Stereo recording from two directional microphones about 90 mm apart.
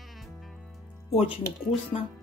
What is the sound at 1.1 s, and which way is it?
Speech, 90° left.